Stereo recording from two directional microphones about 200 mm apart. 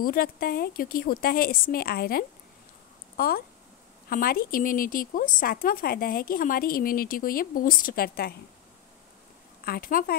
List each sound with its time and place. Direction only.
0.0 s speech: 50° left (ahead or behind)
9.7 s speech: 45° left (ahead or behind)